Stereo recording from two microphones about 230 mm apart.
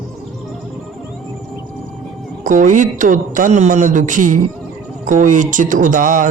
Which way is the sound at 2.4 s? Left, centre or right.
Right.